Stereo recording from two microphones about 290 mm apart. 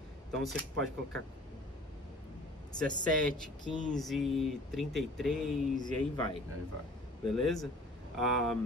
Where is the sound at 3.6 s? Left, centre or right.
Centre.